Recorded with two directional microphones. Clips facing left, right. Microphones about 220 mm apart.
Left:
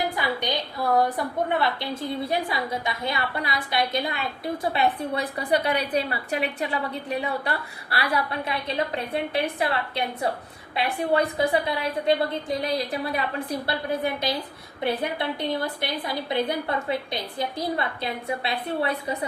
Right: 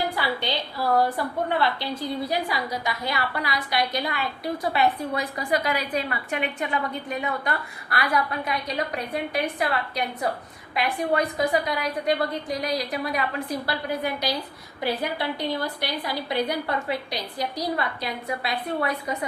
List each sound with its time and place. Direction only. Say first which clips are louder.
0.2 s a woman's voice: even; 20° left (ahead or behind)
17.7 s a woman's voice: even; 25° left (ahead or behind)